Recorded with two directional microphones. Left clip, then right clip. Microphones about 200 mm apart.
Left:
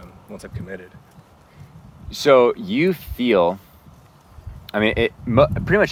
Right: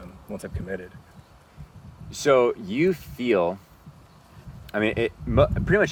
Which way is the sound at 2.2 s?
15° left (ahead or behind).